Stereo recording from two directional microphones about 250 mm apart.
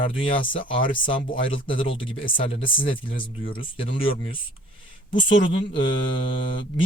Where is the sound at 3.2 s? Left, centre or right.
Left.